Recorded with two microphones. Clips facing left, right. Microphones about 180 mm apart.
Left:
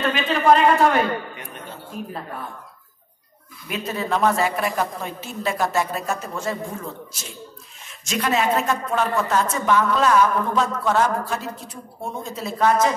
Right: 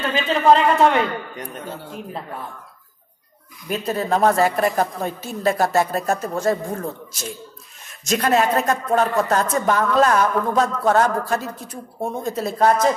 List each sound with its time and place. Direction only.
0.1 s speech: 25° right (ahead or behind)
3.6 s speech: 40° right (ahead or behind)